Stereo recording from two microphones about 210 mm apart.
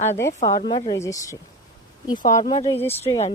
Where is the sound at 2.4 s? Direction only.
30° left (ahead or behind).